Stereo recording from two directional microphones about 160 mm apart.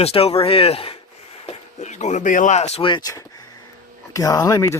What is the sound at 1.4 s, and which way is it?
Speech, 45° left (ahead or behind).